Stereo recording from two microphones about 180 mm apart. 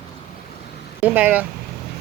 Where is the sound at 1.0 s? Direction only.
10° right (ahead or behind).